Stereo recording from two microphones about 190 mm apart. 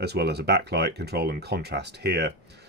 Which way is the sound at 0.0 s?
60° right (ahead or behind).